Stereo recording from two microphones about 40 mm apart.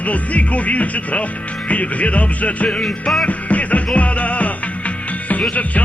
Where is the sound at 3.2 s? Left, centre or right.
Left.